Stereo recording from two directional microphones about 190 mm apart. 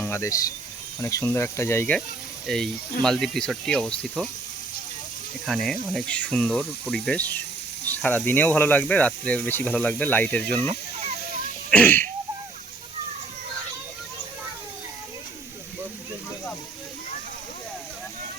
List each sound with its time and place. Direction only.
0.0 s speech: 15° left (ahead or behind)
5.5 s speech: centre (ahead or behind)
11.7 s a sound: 10° left (ahead or behind)